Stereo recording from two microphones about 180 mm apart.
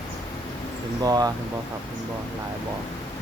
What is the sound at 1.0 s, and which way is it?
Speech, 20° right (ahead or behind).